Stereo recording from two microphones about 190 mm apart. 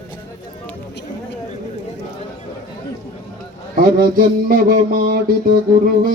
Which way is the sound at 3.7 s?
50° right (ahead or behind).